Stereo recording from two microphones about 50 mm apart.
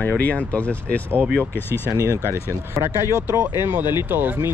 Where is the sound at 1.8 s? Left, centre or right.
Right.